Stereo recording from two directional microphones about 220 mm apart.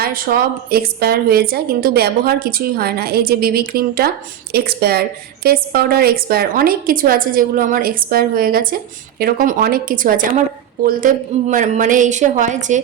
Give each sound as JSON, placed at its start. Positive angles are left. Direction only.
{"t": 0.0, "sound": "a woman's voice", "side_deg": -40}